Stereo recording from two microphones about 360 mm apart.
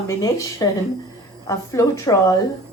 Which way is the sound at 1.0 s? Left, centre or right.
Centre.